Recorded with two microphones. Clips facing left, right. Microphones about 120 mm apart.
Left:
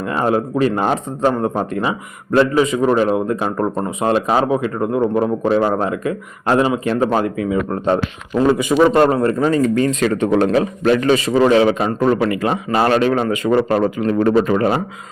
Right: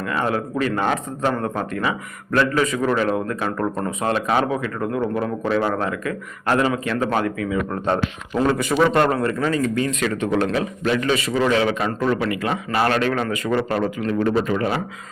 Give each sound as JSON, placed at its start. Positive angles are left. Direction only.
{"t": 0.0, "sound": "a man's voice", "side_deg": 30}
{"t": 8.4, "sound": "a man's voice", "side_deg": 15}
{"t": 9.0, "sound": "a man's voice", "side_deg": 25}
{"t": 13.5, "sound": "a man's voice", "side_deg": 35}
{"t": 14.1, "sound": "speech", "side_deg": 45}